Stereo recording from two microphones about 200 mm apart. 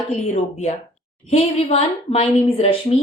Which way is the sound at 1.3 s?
35° left (ahead or behind).